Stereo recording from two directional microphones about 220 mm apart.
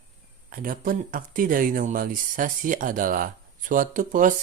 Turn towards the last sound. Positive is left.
turn(degrees=-35)  # may be behind; listen again after turning